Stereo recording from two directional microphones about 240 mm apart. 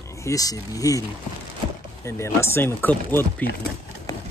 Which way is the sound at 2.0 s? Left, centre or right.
Centre.